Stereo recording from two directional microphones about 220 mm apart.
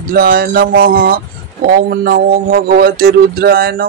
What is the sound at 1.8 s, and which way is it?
Music, 40° right (ahead or behind).